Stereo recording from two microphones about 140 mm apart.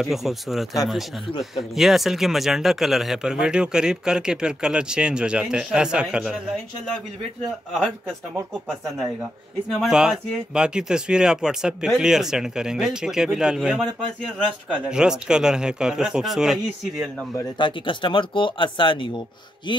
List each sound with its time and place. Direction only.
0.0 s speech: centre (ahead or behind)
9.7 s speech: centre (ahead or behind)
14.9 s speech: 5° right (ahead or behind)
17.4 s speech: 35° left (ahead or behind)